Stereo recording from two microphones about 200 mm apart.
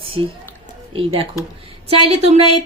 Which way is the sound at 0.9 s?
25° right (ahead or behind).